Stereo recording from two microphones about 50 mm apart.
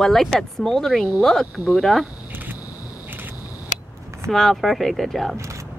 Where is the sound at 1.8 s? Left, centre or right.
Centre.